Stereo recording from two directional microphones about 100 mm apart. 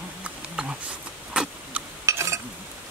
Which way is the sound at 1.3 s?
10° right (ahead or behind).